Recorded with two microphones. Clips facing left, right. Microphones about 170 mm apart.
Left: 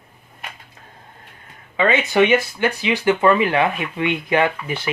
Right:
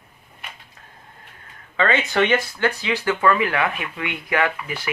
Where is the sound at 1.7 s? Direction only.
15° left (ahead or behind).